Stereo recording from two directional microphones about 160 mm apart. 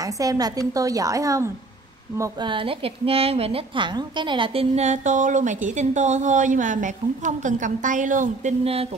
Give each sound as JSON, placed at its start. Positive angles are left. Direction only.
{"t": 0.0, "sound": "a woman's voice", "side_deg": -20}
{"t": 2.4, "sound": "a woman's voice", "side_deg": -35}